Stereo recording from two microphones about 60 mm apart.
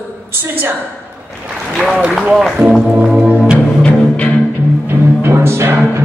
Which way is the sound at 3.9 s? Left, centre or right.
Left.